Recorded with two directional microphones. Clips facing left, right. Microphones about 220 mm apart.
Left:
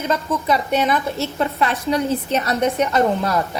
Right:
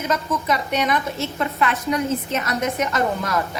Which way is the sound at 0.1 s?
30° left (ahead or behind).